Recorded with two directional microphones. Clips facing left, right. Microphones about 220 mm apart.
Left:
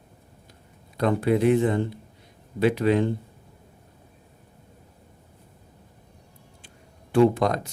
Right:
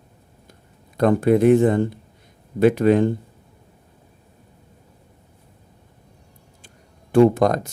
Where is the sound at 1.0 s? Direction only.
50° right (ahead or behind).